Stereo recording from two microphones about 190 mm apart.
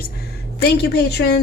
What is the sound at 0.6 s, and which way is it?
Speech, 60° left (ahead or behind).